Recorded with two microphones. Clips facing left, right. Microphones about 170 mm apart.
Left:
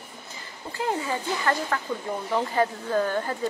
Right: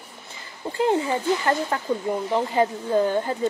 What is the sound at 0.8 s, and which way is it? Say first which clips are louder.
A woman's voice: right 6 dB; 25° right (ahead or behind).